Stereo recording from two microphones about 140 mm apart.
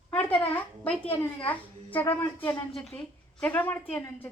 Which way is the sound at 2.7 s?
Centre (ahead or behind).